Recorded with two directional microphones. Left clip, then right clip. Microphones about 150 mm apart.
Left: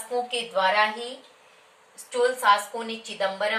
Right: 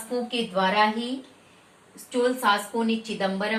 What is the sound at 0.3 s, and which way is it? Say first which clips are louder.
Speech: left 1 dB; 10° right (ahead or behind).